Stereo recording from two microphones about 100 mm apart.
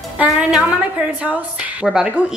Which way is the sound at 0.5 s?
10° right (ahead or behind).